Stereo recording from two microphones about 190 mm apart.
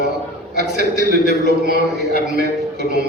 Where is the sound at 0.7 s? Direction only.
60° right (ahead or behind).